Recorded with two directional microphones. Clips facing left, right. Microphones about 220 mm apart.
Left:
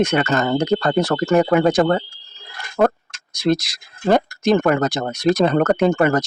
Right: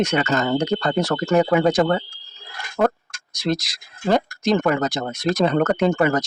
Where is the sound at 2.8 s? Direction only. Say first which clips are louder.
Left 3 dB; 65° left (ahead or behind).